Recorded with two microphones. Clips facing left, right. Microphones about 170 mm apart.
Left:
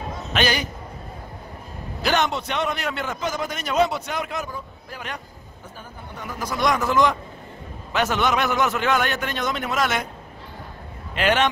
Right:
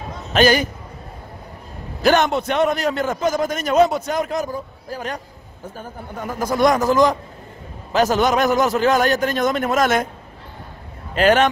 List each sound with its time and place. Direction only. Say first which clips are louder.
0.3 s a man's voice: right 8 dB; 45° right (ahead or behind)
2.0 s a man's voice: right 6 dB; 45° right (ahead or behind)
11.1 s a man's voice: right 6 dB; 40° right (ahead or behind)